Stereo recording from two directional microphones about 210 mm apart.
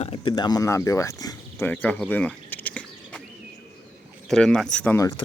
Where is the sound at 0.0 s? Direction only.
25° left (ahead or behind); by 3.2 s 5° left (ahead or behind).